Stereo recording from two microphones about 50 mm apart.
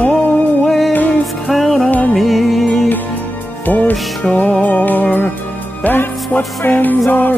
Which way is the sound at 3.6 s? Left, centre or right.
Left.